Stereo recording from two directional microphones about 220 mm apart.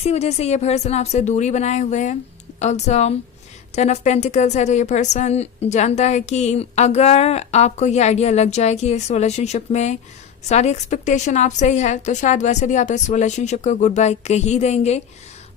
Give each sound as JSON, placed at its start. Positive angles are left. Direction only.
{"t": 0.0, "sound": "a woman's voice", "side_deg": 30}